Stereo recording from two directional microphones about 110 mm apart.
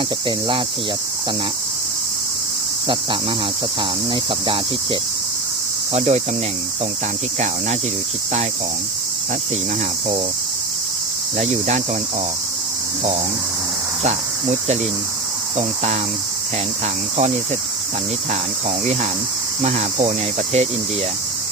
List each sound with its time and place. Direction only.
0.3 s cricket: 45° right (ahead or behind)
2.8 s cricket: 45° right (ahead or behind)
5.9 s cricket: 75° right (ahead or behind)
7.3 s cricket: 80° right
11.3 s cricket: 75° right (ahead or behind)
15.5 s cricket: 75° right (ahead or behind)
19.6 s cricket: 70° right (ahead or behind)